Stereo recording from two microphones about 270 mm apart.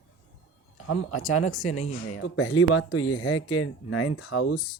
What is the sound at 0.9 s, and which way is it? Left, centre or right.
Speech, left.